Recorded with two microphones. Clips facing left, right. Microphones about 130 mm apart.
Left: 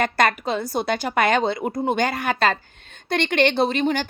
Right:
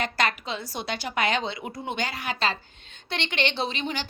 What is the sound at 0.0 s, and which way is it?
A woman's voice, 50° left (ahead or behind).